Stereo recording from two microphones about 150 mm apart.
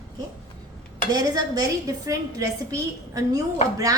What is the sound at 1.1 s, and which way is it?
A woman's voice, 25° right (ahead or behind).